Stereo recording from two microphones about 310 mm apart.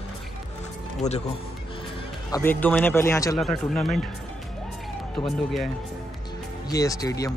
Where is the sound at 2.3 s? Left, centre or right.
Centre.